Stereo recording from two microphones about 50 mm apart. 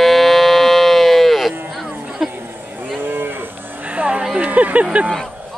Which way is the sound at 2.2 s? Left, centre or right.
Centre.